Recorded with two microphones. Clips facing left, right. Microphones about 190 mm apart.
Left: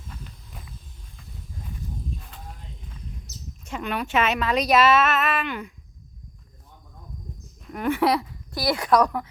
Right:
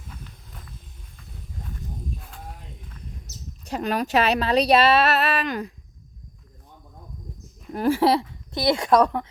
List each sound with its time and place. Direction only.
3.6 s speech: 35° right (ahead or behind)
7.7 s speech: 30° right (ahead or behind)